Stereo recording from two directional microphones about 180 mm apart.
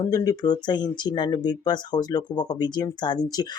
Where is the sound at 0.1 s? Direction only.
20° left (ahead or behind).